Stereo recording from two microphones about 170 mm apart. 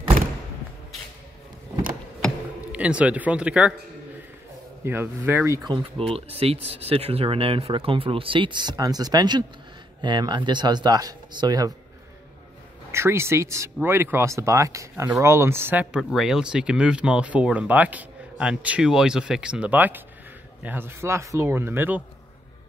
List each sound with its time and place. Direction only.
2.2 s a sound: 5° right (ahead or behind)
4.8 s speech: 10° right (ahead or behind)
5.6 s speech: 25° right (ahead or behind)
12.9 s speech: 15° right (ahead or behind)